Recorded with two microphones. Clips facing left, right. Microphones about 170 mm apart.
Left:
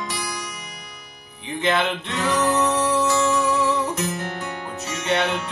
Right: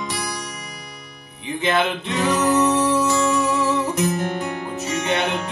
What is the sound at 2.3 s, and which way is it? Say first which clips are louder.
Music: right 2 dB; 5° right (ahead or behind).